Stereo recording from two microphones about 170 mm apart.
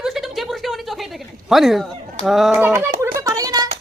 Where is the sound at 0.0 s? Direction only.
Centre (ahead or behind).